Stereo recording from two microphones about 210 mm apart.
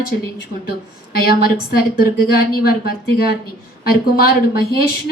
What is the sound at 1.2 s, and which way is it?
A woman's voice, 45° left (ahead or behind).